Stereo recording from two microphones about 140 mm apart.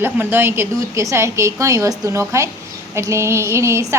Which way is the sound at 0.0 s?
15° right (ahead or behind).